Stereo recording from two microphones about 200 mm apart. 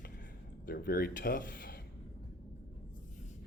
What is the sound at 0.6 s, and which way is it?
Speech, 50° left (ahead or behind).